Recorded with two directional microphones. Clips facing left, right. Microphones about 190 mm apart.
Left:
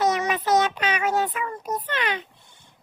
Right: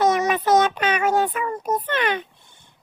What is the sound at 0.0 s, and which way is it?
Child singing, 50° right (ahead or behind).